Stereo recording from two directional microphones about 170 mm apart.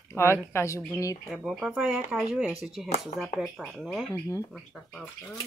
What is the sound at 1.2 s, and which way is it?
Speech, centre (ahead or behind).